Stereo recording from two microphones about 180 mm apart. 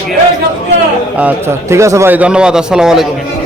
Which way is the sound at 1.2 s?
15° right (ahead or behind).